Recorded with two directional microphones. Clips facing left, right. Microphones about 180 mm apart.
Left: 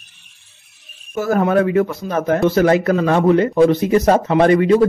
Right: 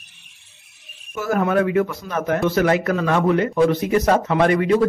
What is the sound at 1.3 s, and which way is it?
A man's voice, 35° left (ahead or behind).